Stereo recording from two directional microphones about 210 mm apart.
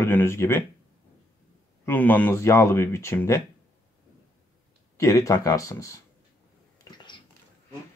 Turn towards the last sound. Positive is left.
turn(degrees=20)  # may be behind; listen again after turning